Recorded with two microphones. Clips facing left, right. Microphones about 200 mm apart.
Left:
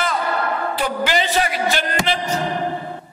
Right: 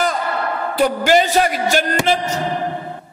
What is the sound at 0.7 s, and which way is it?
A man's voice, 45° right (ahead or behind).